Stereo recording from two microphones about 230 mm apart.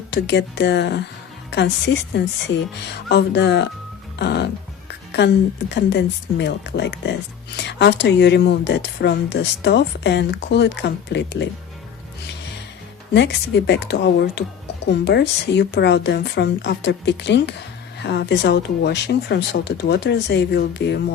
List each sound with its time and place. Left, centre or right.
0.1 s speech: left
13.1 s speech: left